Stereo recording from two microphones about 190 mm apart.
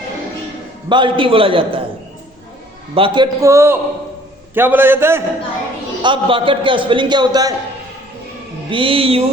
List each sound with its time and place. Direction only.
0.9 s a man's voice: 25° right (ahead or behind)
2.9 s a man's voice: 25° right (ahead or behind)
6.0 s a man's voice: 25° right (ahead or behind)
8.7 s a man's voice: 25° right (ahead or behind)